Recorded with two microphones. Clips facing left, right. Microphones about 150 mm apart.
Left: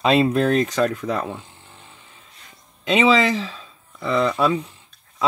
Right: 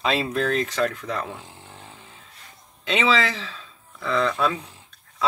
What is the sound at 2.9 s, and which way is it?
Speech, 10° left (ahead or behind).